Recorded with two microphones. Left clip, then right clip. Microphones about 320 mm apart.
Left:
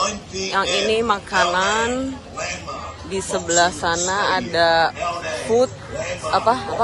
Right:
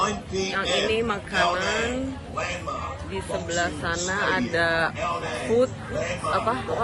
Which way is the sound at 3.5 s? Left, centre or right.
Centre.